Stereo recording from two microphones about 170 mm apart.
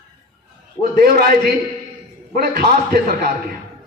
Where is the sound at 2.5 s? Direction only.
65° right (ahead or behind).